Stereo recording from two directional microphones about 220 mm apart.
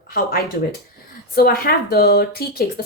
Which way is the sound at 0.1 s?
40° left (ahead or behind).